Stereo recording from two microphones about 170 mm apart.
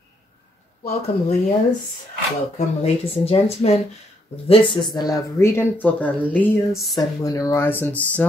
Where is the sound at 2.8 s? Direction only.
40° left (ahead or behind).